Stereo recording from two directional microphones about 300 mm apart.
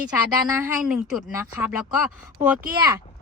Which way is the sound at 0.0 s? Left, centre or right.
Centre.